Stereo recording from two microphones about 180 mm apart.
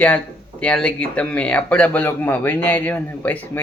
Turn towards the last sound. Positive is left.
turn(degrees=10)  # may be behind; listen again after turning